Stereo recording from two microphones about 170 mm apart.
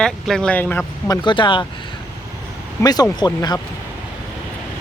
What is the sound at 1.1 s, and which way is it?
Speech, 25° left (ahead or behind).